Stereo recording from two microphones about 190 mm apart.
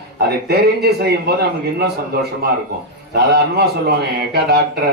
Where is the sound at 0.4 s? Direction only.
55° right (ahead or behind).